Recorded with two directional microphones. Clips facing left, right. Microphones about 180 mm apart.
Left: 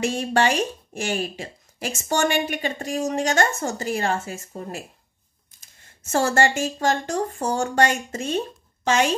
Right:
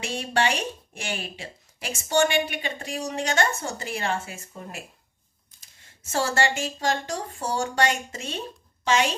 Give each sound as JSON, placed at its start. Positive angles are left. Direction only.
{"t": 0.0, "sound": "speech", "side_deg": 45}
{"t": 6.1, "sound": "a woman's voice", "side_deg": 45}